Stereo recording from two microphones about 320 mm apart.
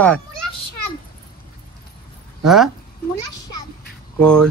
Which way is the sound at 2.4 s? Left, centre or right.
Centre.